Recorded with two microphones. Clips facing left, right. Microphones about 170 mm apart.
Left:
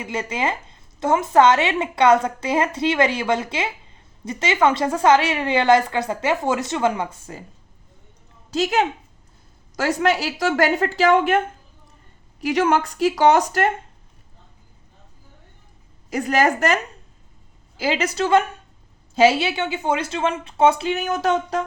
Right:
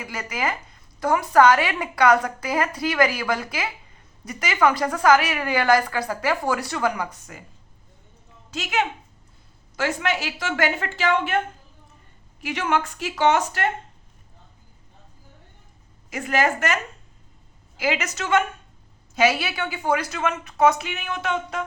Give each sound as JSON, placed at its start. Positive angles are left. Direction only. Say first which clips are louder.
{"t": 0.0, "sound": "speech", "louder": "left 4 dB", "side_deg": 25}
{"t": 8.4, "sound": "a woman's voice", "louder": "left 5 dB", "side_deg": 35}
{"t": 12.4, "sound": "a woman's voice", "louder": "left 6 dB", "side_deg": 40}
{"t": 16.0, "sound": "a woman's voice", "louder": "left 4 dB", "side_deg": 40}